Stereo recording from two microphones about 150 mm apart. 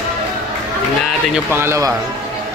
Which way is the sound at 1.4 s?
15° right (ahead or behind).